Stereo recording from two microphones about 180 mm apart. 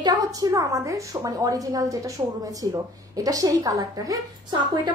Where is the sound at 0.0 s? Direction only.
20° right (ahead or behind).